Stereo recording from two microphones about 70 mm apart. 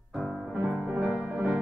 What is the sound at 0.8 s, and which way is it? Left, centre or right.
Music, centre.